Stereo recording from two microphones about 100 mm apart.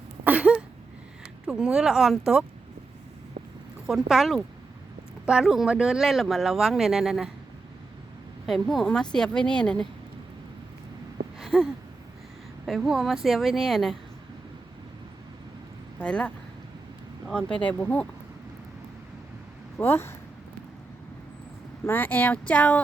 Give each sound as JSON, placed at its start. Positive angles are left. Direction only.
{"t": 0.3, "sound": "a sound", "side_deg": -15}
{"t": 1.5, "sound": "speech", "side_deg": -10}
{"t": 3.8, "sound": "speech", "side_deg": -5}
{"t": 8.4, "sound": "a woman's voice", "side_deg": 0}
{"t": 11.3, "sound": "a sound", "side_deg": 0}
{"t": 12.6, "sound": "speech", "side_deg": 0}
{"t": 16.0, "sound": "a woman's voice", "side_deg": 10}
{"t": 19.8, "sound": "speech", "side_deg": 25}
{"t": 21.8, "sound": "a woman's voice", "side_deg": 20}